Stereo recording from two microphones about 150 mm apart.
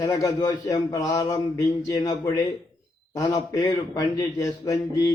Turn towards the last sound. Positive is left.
turn(degrees=25)  # may be behind; listen again after turning